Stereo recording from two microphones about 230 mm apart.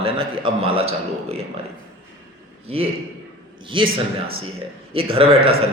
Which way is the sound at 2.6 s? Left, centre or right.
Right.